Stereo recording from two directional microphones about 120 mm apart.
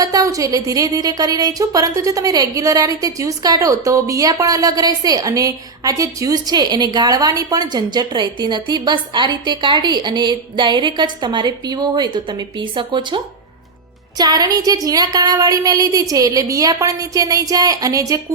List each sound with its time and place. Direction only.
0.0 s a woman's voice: 30° right (ahead or behind)